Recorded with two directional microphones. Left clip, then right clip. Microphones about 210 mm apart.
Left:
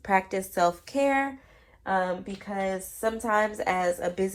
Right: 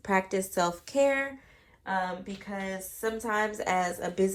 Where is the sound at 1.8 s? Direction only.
Centre (ahead or behind).